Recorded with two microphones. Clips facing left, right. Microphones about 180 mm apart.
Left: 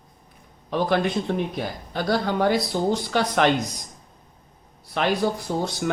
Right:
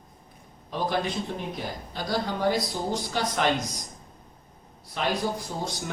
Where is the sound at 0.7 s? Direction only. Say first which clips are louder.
Left 6 dB; 70° left (ahead or behind).